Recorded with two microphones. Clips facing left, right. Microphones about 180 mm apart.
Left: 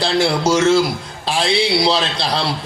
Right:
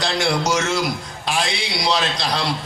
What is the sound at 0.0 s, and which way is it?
A man's voice, 30° left (ahead or behind).